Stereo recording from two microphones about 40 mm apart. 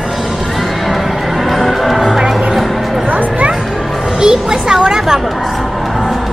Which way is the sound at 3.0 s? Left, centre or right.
Right.